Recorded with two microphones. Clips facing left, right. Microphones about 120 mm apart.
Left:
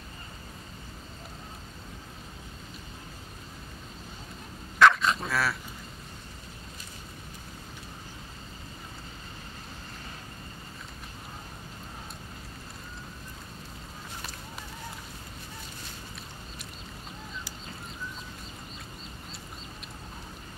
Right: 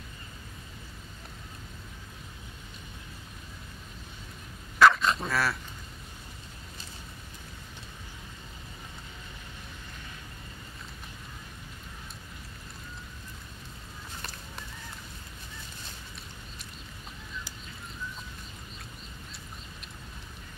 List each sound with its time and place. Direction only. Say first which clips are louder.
4.7 s dog: even; centre (ahead or behind)